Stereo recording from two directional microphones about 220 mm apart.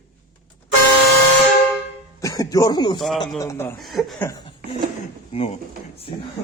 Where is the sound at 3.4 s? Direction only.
10° left (ahead or behind).